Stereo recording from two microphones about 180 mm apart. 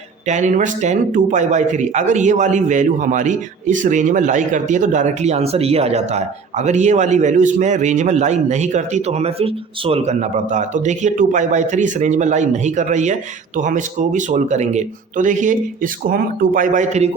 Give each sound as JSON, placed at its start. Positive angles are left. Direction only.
{"t": 0.3, "sound": "speech", "side_deg": -40}